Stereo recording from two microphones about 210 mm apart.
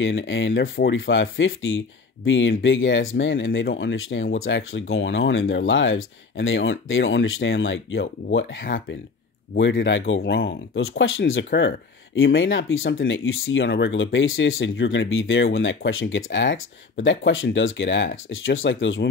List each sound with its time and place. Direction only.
0.0 s speech: 65° left (ahead or behind)
10.8 s speech: 70° left (ahead or behind)